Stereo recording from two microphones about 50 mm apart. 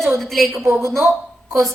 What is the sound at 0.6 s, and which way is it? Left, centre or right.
Speech, right.